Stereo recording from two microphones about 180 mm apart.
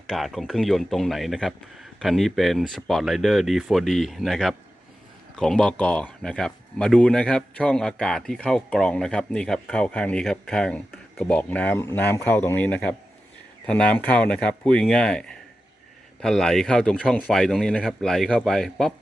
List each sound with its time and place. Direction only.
0.1 s speech: centre (ahead or behind)